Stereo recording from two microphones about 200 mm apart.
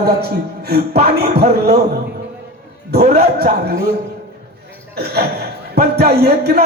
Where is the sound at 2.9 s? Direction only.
55° right (ahead or behind).